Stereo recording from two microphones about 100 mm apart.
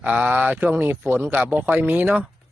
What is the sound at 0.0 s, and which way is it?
Speech, 15° right (ahead or behind).